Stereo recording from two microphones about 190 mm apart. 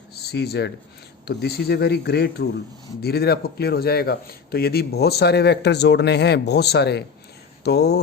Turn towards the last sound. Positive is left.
turn(degrees=60)  # may be behind; listen again after turning